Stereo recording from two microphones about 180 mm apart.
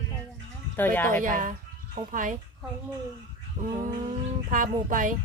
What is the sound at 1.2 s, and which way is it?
Speech, 45° right (ahead or behind).